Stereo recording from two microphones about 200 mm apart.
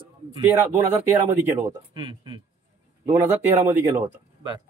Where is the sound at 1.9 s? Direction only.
25° right (ahead or behind).